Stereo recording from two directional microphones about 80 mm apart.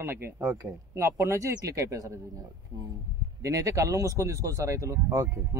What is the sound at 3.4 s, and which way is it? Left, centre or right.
Speech, right.